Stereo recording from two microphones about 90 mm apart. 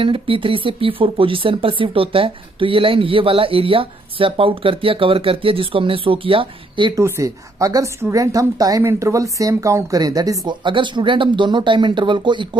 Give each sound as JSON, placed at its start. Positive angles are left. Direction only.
{"t": 0.0, "sound": "speech", "side_deg": -75}
{"t": 7.0, "sound": "a woman's voice", "side_deg": -35}
{"t": 10.6, "sound": "speech", "side_deg": -60}